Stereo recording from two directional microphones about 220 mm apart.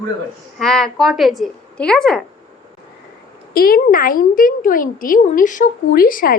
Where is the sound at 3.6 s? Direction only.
40° left (ahead or behind).